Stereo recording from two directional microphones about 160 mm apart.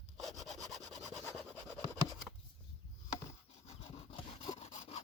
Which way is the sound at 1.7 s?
Centre (ahead or behind).